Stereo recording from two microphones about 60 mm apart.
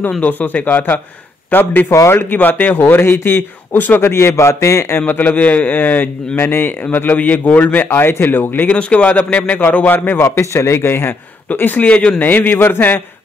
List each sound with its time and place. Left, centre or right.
0.2 s a man's voice: left
4.1 s a man's voice: left
4.9 s a man's voice: left
8.7 s speech: left
10.2 s a man's voice: left
11.4 s a man's voice: left